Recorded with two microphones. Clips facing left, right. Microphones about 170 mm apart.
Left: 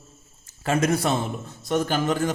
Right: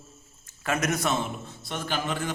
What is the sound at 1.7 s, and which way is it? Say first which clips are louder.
Speech: left 8 dB; 45° left (ahead or behind).